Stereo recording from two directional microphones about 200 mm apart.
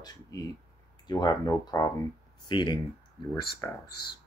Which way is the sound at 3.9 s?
50° left (ahead or behind).